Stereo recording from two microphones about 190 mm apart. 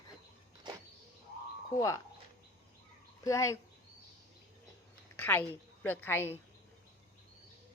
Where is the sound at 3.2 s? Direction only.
15° left (ahead or behind).